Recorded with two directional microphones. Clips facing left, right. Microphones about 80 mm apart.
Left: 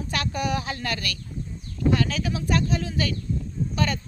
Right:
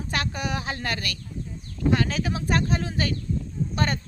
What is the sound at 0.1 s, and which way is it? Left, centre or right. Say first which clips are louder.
Speech: left 2 dB; right.